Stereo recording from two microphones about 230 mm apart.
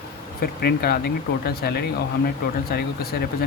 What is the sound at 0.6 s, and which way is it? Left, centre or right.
Speech, left.